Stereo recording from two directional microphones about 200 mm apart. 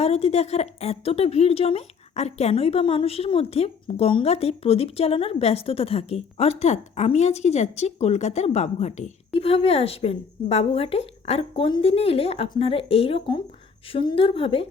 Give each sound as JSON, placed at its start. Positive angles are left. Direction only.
{"t": 0.0, "sound": "speech", "side_deg": 30}